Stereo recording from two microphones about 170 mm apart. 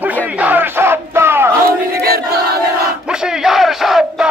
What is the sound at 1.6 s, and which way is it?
Battle cry, 65° right (ahead or behind).